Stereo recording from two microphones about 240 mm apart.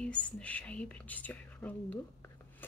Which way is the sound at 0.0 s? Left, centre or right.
Centre.